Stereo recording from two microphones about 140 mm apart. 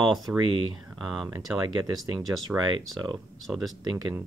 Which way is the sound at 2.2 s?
25° right (ahead or behind).